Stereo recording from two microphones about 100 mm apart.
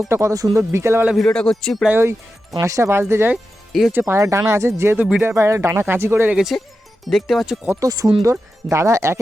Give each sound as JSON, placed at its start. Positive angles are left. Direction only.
{"t": 0.1, "sound": "speech", "side_deg": -30}
{"t": 1.1, "sound": "a man's voice", "side_deg": 5}
{"t": 1.9, "sound": "speech", "side_deg": -25}
{"t": 3.7, "sound": "speech", "side_deg": 0}
{"t": 3.9, "sound": "speech", "side_deg": -30}
{"t": 6.3, "sound": "speech", "side_deg": -5}
{"t": 7.8, "sound": "speech", "side_deg": -35}